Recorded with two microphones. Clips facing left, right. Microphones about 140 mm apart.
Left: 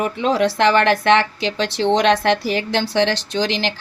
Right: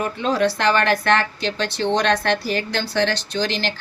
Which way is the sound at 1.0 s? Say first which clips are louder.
Left 4 dB; 90° left.